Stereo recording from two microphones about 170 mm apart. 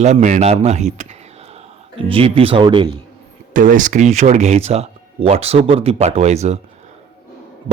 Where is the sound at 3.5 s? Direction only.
50° right (ahead or behind).